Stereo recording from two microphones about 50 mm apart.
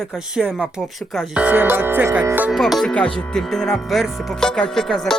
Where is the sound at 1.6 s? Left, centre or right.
Right.